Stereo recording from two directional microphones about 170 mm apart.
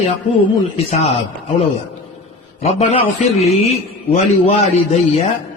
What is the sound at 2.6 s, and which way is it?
A man's voice, 40° left (ahead or behind).